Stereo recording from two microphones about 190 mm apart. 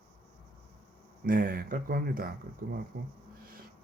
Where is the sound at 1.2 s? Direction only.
50° right (ahead or behind).